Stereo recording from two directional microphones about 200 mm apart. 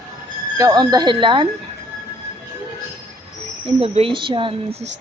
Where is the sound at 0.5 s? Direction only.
20° right (ahead or behind).